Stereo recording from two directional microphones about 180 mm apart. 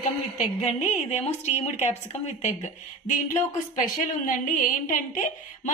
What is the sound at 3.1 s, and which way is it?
Speech, 45° left (ahead or behind).